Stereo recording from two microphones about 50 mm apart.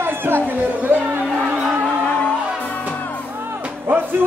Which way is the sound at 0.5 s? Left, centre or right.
Right.